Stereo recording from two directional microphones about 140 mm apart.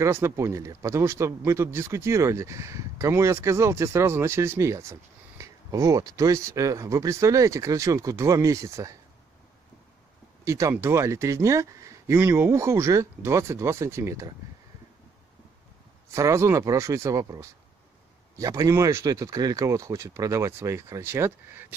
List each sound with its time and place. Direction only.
0.0 s speech: 20° right (ahead or behind)
10.4 s speech: 20° right (ahead or behind)
16.1 s speech: 20° right (ahead or behind)